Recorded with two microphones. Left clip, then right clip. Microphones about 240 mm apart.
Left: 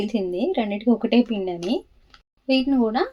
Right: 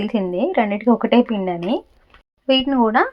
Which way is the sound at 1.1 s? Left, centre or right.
Right.